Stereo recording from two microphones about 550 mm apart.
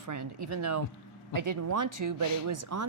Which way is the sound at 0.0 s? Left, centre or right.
Right.